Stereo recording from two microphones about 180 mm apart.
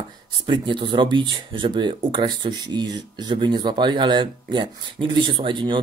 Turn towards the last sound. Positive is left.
turn(degrees=-25)  # may be behind; listen again after turning